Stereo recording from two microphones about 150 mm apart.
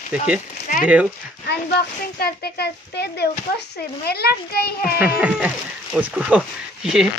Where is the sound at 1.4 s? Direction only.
90° left.